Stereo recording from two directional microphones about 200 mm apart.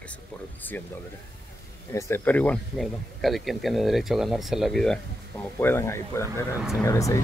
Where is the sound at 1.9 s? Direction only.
10° left (ahead or behind).